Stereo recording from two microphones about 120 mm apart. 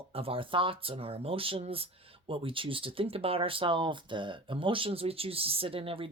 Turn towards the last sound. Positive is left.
turn(degrees=-50)  # may be behind; listen again after turning